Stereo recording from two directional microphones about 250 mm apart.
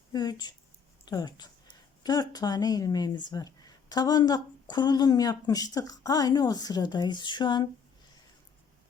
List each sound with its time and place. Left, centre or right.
0.1 s speech: centre